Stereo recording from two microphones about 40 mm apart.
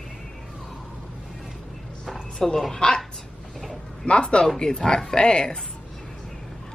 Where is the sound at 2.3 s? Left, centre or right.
Centre.